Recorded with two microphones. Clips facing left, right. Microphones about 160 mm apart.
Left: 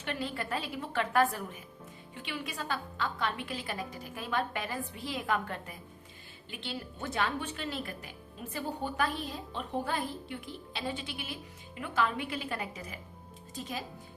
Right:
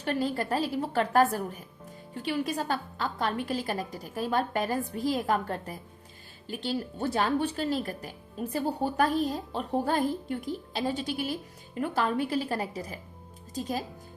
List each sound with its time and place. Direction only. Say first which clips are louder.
0.0 s speech: right 7 dB; 40° right (ahead or behind)